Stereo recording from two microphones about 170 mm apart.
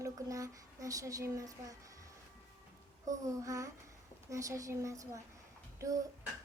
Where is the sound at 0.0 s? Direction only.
20° right (ahead or behind).